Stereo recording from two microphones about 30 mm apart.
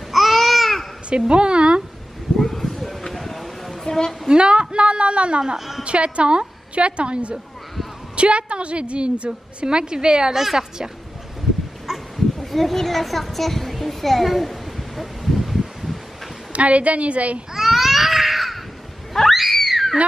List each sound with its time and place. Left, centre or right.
0.1 s babbling: centre
1.3 s a woman's voice: right
2.3 s a sound: centre
3.8 s a sound: centre
4.3 s a woman's voice: right
10.3 s a woman's voice: centre
12.4 s a child's voice: centre
15.0 s a sound: centre
16.5 s a woman's voice: right
17.6 s baby cry: centre
19.3 s screaming: centre